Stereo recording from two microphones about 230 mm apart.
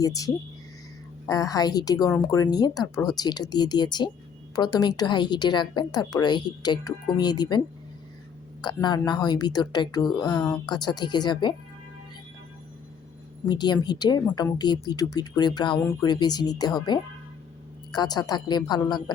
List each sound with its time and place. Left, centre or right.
0.0 s a woman's voice: centre
1.3 s a woman's voice: centre
8.6 s a woman's voice: centre
13.5 s a woman's voice: centre